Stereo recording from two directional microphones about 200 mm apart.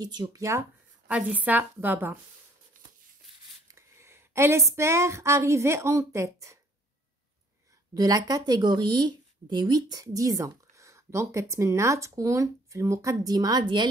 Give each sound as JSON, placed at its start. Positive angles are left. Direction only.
{"t": 0.0, "sound": "speech", "side_deg": -20}
{"t": 3.6, "sound": "speech", "side_deg": -15}
{"t": 7.9, "sound": "speech", "side_deg": -20}